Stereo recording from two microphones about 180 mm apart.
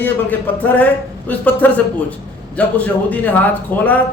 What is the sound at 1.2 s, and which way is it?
A man's voice, 10° left (ahead or behind).